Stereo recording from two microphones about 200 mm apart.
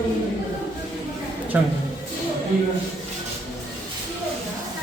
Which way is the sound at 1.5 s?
5° right (ahead or behind).